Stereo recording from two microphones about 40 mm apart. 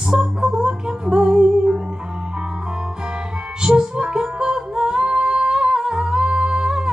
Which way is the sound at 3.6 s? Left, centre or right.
Right.